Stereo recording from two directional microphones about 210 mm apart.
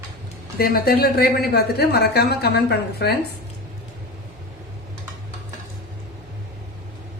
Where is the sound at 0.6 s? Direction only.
45° left (ahead or behind).